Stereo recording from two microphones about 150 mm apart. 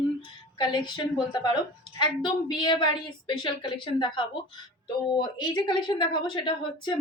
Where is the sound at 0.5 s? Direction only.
30° left (ahead or behind).